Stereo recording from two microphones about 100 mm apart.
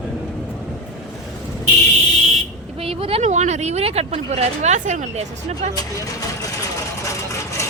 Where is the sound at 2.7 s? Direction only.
75° right (ahead or behind); by 4.4 s 90° right.